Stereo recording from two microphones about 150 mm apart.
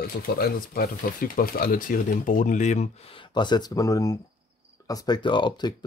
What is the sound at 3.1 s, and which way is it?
Speech, 30° left (ahead or behind).